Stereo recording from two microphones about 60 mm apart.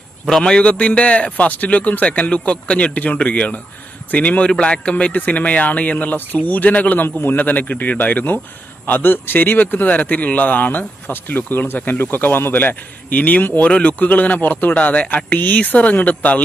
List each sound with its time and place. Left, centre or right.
0.3 s a man's voice: centre